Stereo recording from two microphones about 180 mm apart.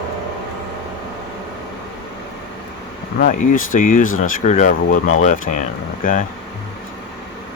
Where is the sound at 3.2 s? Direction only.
50° left (ahead or behind).